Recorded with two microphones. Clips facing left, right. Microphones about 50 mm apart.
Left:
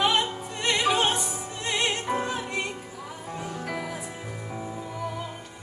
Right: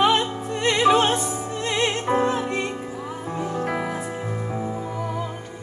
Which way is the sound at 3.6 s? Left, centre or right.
Right.